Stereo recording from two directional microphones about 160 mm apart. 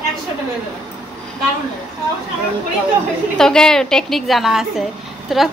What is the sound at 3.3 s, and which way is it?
A woman's voice, 5° left (ahead or behind).